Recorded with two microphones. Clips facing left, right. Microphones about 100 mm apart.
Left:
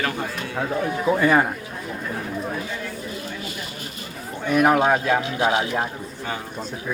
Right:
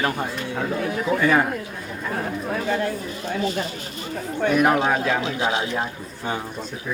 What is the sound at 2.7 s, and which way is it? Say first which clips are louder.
Speech: right 7 dB; 65° right (ahead or behind).